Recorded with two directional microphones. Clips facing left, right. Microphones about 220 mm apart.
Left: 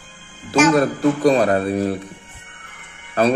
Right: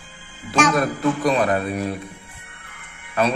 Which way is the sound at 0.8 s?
35° left (ahead or behind).